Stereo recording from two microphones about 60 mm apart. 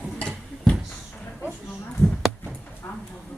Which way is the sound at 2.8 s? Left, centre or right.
Left.